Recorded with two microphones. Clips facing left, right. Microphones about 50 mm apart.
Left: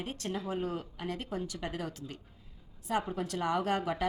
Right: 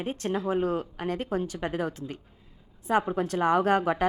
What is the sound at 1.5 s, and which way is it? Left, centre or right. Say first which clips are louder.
A woman's voice: right 8 dB; right.